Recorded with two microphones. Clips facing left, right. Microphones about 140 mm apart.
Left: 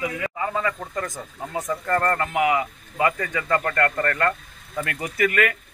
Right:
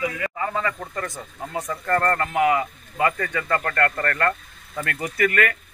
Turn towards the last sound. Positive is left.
turn(degrees=15)  # may be behind; listen again after turning